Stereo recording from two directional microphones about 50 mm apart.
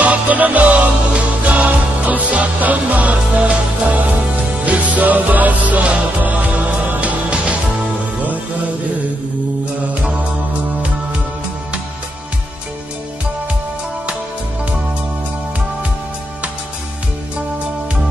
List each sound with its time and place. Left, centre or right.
0.0 s music: right
9.8 s music: right